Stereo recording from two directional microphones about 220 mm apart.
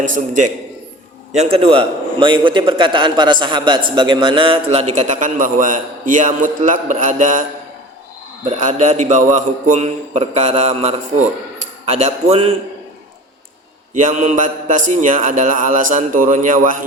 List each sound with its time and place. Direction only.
0.0 s a man's voice: 35° right (ahead or behind)
8.4 s a man's voice: 35° right (ahead or behind)
13.9 s a man's voice: 35° right (ahead or behind)